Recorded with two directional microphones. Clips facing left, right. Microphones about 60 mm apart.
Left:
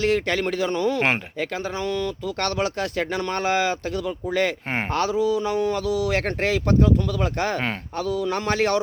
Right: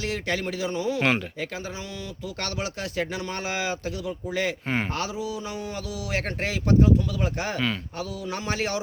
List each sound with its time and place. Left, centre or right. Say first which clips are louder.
0.0 s speech: left 7 dB; left
4.7 s speech: left 5 dB; left
8.0 s speech: left 8 dB; left